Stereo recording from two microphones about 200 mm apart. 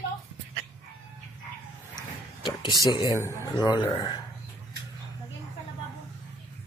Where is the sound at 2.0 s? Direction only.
20° left (ahead or behind).